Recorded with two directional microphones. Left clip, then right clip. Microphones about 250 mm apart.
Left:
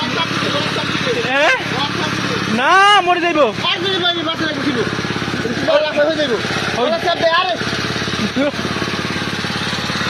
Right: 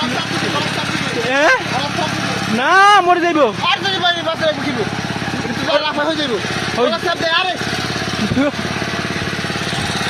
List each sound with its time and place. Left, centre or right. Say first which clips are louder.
1.3 s vehicle: right 2 dB; right
2.6 s speech: right 1 dB; centre